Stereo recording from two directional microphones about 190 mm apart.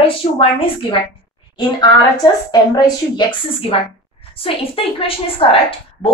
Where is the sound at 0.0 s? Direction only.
30° left (ahead or behind).